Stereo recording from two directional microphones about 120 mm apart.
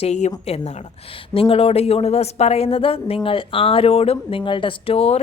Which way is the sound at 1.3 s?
55° left (ahead or behind).